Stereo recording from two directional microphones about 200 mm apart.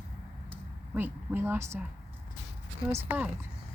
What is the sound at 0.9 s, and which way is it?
Speech, 10° right (ahead or behind).